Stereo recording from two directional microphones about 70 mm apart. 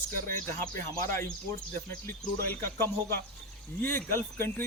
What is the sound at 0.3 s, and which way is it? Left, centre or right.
Speech, left.